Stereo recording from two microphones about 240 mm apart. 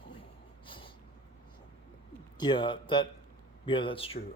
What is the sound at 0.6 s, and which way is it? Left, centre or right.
Snort, left.